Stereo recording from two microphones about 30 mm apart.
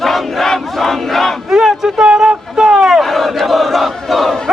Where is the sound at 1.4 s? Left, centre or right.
Centre.